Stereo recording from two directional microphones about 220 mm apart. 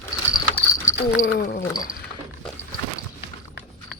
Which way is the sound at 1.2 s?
40° left (ahead or behind).